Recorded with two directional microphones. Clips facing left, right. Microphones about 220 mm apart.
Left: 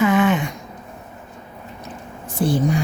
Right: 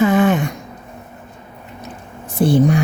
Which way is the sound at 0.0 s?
35° right (ahead or behind).